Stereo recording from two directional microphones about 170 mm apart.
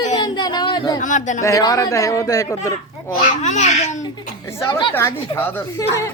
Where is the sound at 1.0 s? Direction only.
50° left (ahead or behind).